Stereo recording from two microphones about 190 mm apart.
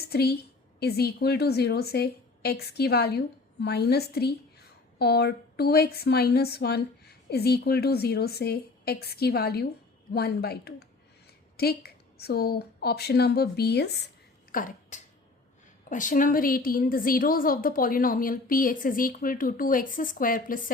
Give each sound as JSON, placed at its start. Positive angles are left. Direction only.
{"t": 0.1, "sound": "a woman's voice", "side_deg": 55}
{"t": 14.5, "sound": "a woman's voice", "side_deg": 40}